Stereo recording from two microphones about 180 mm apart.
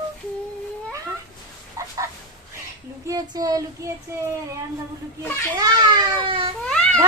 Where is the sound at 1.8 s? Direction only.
15° right (ahead or behind).